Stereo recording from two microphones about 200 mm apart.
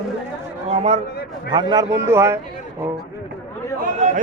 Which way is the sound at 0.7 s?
30° right (ahead or behind).